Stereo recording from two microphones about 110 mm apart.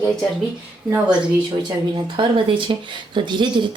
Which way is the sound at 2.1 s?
45° right (ahead or behind).